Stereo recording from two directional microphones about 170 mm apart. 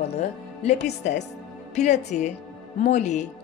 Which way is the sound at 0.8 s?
40° left (ahead or behind).